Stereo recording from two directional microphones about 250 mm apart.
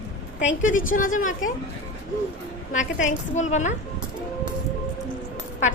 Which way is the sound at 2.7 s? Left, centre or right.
Left.